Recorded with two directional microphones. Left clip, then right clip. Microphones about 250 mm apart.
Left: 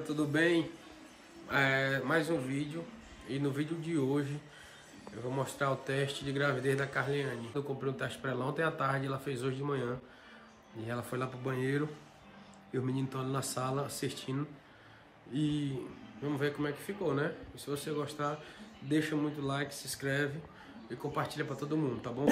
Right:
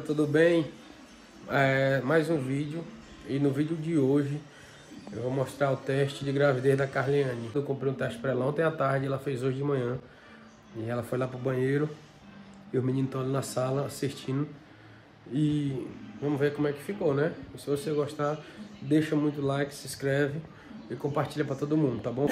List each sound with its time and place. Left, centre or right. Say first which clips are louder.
0.1 s speech: right 7 dB; centre